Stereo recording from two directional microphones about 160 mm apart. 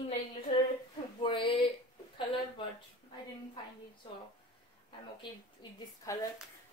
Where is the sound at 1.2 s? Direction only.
30° left (ahead or behind).